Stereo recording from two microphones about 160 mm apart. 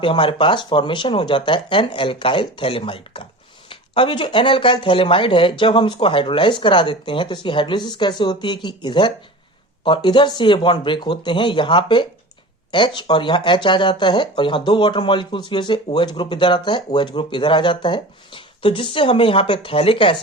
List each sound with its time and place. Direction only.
0.0 s speech: 30° left (ahead or behind)